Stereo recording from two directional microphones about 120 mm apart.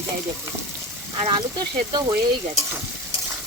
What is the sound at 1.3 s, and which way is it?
Speech, 35° right (ahead or behind).